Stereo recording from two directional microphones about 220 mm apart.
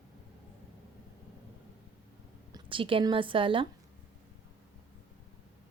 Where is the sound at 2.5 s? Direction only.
25° right (ahead or behind).